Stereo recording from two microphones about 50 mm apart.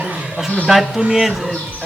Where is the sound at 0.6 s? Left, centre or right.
Centre.